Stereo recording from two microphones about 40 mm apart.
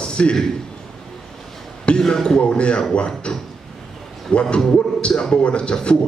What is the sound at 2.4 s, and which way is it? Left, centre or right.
A man's voice, left.